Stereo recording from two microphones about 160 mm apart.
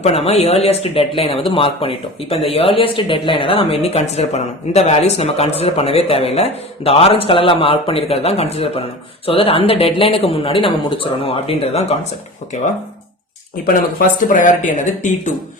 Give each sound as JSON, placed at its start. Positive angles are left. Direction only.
{"t": 0.0, "sound": "speech", "side_deg": 40}
{"t": 13.7, "sound": "speech", "side_deg": 60}